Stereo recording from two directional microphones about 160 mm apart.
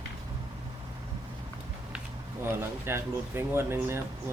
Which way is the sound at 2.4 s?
15° right (ahead or behind).